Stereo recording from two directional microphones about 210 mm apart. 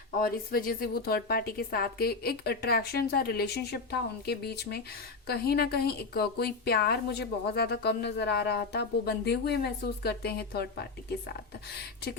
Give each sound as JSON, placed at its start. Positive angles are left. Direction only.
{"t": 0.2, "sound": "speech", "side_deg": 45}